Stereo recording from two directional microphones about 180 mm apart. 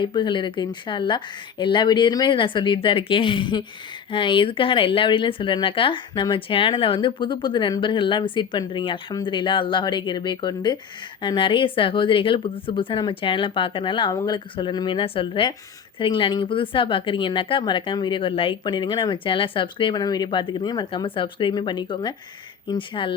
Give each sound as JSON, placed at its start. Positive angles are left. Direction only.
{"t": 0.0, "sound": "speech", "side_deg": 25}